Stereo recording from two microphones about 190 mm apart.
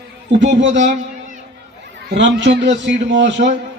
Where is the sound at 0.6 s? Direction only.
70° right (ahead or behind).